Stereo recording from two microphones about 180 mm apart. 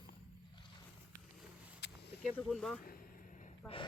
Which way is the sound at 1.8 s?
70° left (ahead or behind).